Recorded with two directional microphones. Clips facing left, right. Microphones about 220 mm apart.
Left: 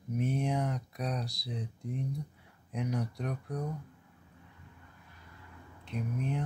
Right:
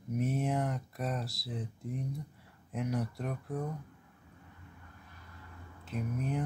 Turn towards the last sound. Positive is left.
turn(degrees=0)  # may be behind; listen again after turning